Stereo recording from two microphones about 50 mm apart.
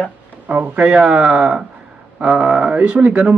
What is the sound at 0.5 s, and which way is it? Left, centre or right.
Speech, right.